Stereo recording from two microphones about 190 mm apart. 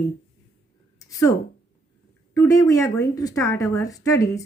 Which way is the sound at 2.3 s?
15° left (ahead or behind).